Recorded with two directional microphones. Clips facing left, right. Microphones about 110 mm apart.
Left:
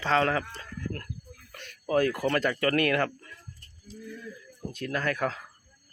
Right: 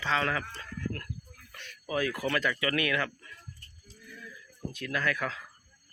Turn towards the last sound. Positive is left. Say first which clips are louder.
# left 3 dB
turn(degrees=40)  # may be behind; listen again after turning